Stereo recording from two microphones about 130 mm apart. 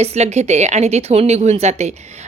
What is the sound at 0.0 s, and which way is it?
A woman's voice, 55° right (ahead or behind).